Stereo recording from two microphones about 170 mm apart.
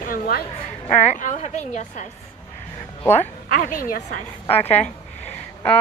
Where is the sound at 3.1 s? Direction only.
45° left (ahead or behind).